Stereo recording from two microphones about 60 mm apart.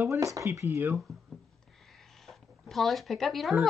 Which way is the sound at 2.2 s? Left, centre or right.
Centre.